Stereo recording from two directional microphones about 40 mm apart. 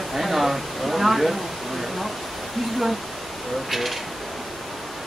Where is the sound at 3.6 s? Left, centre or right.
Centre.